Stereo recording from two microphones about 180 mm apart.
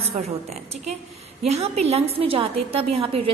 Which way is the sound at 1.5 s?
35° right (ahead or behind).